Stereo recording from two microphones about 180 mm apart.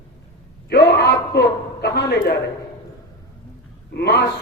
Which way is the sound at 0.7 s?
65° left (ahead or behind).